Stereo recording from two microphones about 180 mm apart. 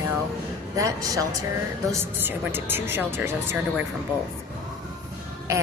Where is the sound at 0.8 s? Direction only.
20° right (ahead or behind).